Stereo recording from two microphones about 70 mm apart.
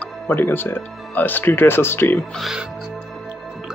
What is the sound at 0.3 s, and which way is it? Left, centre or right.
Speech, left.